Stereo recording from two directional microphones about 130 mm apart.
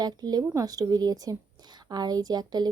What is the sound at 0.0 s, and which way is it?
A woman's voice, 30° right (ahead or behind).